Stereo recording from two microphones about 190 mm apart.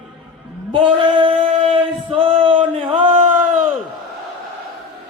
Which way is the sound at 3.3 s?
10° right (ahead or behind).